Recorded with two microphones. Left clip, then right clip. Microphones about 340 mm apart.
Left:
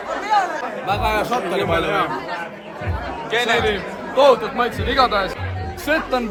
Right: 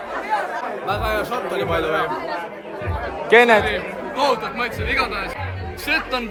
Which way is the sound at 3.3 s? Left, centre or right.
Right.